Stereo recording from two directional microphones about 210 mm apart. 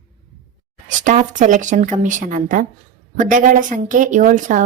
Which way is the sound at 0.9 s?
35° right (ahead or behind).